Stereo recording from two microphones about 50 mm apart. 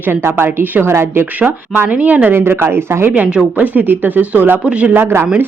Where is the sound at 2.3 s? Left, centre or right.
Right.